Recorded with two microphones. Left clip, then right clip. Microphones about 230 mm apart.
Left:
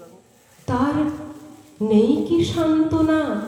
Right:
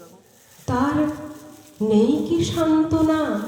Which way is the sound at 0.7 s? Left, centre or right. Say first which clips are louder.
Even; right.